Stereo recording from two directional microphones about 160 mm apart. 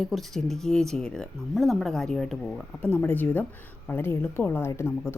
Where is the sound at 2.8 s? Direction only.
15° left (ahead or behind).